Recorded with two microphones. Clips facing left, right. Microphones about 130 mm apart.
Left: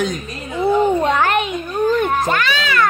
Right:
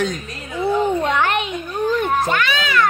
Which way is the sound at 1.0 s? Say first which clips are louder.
Left 3 dB; 40° left (ahead or behind).